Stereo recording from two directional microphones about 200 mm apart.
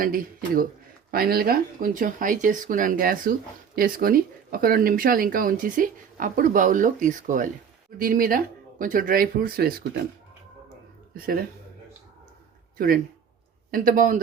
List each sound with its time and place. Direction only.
0.0 s speech: 45° right (ahead or behind)
11.1 s speech: 45° right (ahead or behind)
12.7 s speech: 45° right (ahead or behind)